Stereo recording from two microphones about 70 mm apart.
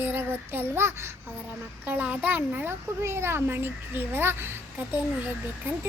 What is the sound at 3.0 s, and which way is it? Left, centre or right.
A child's voice, right.